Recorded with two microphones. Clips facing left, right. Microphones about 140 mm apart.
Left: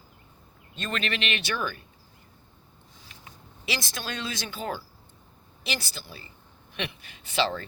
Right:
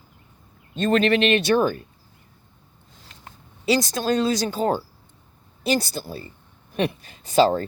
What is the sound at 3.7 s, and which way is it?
Speech, 40° right (ahead or behind).